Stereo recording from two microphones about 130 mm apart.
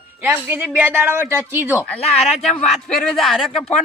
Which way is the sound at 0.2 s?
15° right (ahead or behind).